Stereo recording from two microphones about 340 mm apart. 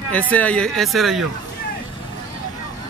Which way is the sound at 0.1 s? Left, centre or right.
Centre.